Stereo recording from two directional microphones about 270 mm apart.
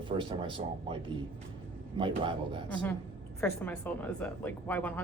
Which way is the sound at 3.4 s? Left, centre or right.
Centre.